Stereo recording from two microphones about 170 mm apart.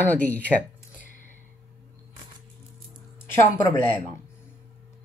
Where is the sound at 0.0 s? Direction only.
10° left (ahead or behind).